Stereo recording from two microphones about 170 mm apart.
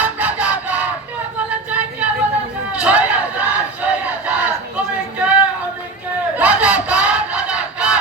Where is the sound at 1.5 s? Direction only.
5° right (ahead or behind).